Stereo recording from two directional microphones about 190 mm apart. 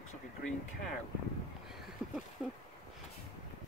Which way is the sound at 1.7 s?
Centre (ahead or behind).